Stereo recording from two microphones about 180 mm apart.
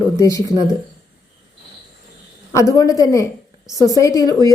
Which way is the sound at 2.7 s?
20° left (ahead or behind).